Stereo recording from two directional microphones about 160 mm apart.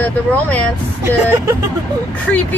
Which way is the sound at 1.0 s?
15° right (ahead or behind).